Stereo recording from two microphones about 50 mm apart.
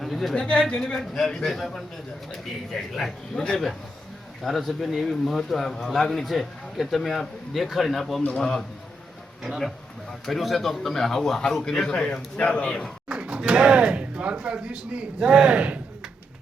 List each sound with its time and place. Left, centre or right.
0.0 s a sound: centre
0.3 s speech: centre
0.9 s a man's voice: centre
3.3 s a man's voice: centre
4.4 s a man's voice: centre
8.4 s a man's voice: centre
9.4 s a man's voice: centre; by 12.7 s left
13.1 s speech: centre